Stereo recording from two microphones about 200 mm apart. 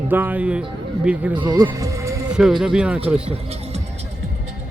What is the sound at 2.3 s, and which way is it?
Speech, 5° right (ahead or behind).